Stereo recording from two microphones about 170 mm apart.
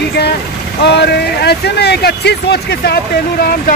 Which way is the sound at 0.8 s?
80° left.